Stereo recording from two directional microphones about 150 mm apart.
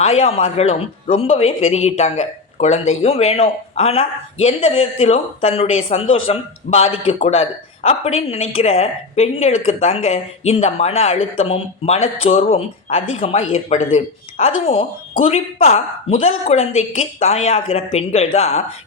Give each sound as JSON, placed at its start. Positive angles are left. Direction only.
{"t": 0.0, "sound": "speech", "side_deg": 45}